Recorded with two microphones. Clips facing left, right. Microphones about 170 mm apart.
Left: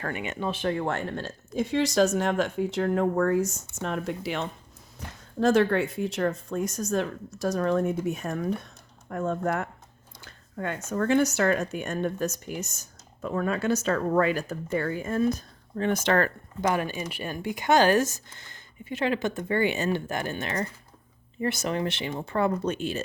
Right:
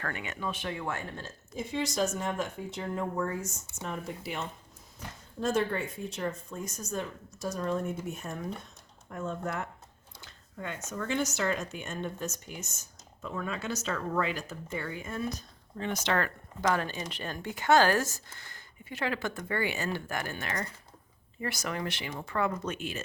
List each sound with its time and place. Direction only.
0.0 s speech: 20° left (ahead or behind)
0.6 s speech: 45° left (ahead or behind)
0.9 s speech: 70° left (ahead or behind)
10.2 s a sound: 55° left (ahead or behind)
10.8 s speech: 60° left (ahead or behind)
16.6 s speech: 15° left (ahead or behind); by 23.0 s 30° left (ahead or behind)